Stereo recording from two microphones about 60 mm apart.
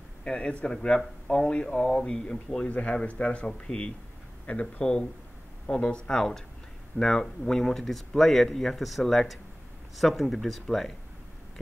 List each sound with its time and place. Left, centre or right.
0.2 s speech: centre
2.7 s speech: left
6.0 s speech: centre